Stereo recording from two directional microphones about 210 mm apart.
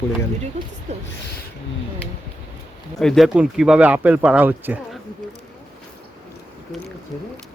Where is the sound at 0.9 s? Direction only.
30° right (ahead or behind).